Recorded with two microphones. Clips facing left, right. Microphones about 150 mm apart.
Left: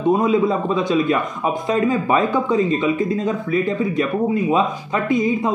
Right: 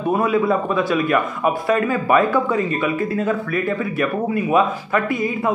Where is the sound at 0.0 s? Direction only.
20° left (ahead or behind).